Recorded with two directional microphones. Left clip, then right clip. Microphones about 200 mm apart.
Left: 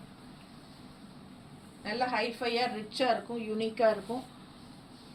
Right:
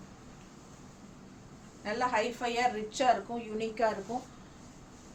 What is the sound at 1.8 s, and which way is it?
Speech, 20° right (ahead or behind).